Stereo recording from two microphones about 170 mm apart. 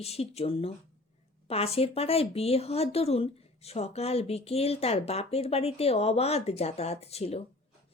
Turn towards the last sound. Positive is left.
turn(degrees=35)  # may be behind; listen again after turning